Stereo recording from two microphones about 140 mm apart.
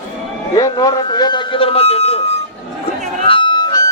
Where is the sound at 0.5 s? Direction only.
25° left (ahead or behind); by 2.2 s 45° left (ahead or behind).